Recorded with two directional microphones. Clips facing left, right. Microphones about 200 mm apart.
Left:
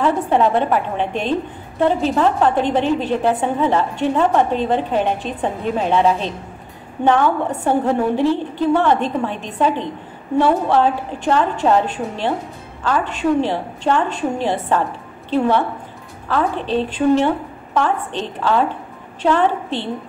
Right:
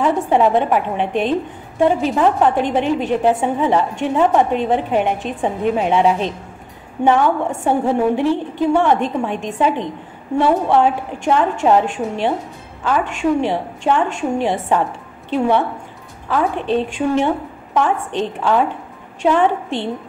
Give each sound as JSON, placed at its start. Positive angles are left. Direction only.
{"t": 0.0, "sound": "a woman's voice", "side_deg": -15}
{"t": 10.7, "sound": "a woman's voice", "side_deg": -15}